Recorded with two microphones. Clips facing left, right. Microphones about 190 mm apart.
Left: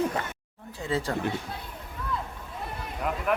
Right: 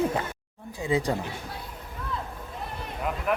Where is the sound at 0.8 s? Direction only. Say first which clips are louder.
Right 3 dB; 15° right (ahead or behind).